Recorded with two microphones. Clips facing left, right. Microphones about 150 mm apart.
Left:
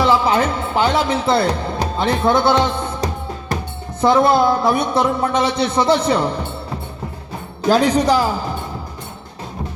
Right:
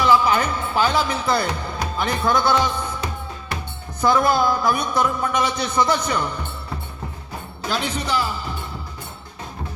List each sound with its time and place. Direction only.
0.0 s a man's voice: 30° left (ahead or behind)
7.7 s a man's voice: 40° left (ahead or behind)